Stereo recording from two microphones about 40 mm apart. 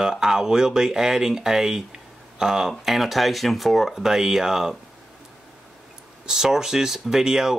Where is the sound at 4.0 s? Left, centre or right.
Centre.